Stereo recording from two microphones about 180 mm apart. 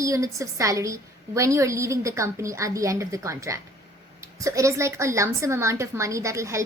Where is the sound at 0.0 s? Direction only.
15° right (ahead or behind).